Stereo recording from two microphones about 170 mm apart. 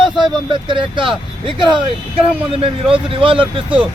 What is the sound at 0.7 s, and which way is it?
Speech, 30° right (ahead or behind).